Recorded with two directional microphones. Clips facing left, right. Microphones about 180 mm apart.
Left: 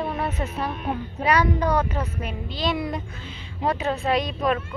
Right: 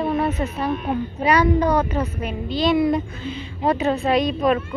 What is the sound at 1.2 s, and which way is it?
Speech, centre (ahead or behind).